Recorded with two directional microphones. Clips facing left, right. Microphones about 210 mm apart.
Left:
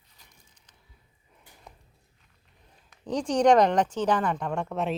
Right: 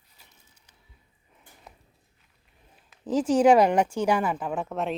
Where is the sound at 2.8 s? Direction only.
5° right (ahead or behind).